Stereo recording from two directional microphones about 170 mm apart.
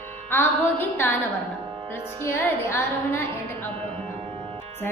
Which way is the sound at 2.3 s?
15° left (ahead or behind).